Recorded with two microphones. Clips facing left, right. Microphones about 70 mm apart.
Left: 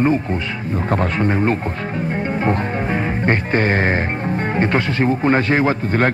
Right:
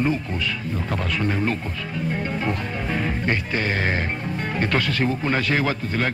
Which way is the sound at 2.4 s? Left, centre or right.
Left.